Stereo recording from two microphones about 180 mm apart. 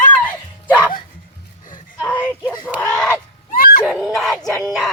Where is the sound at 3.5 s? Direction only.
50° left (ahead or behind).